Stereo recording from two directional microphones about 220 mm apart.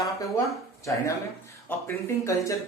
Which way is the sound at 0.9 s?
10° left (ahead or behind).